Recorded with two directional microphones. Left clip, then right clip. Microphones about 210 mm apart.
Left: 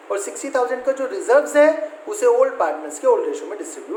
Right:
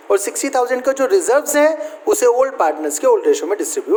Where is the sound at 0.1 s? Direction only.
50° right (ahead or behind).